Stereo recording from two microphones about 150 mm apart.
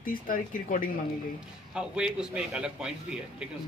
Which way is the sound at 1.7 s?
5° right (ahead or behind).